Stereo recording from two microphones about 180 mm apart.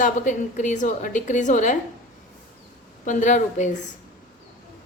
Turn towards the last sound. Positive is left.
turn(degrees=45)  # may be behind; listen again after turning